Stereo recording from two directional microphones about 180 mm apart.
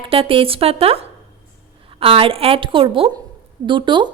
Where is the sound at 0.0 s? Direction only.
30° right (ahead or behind).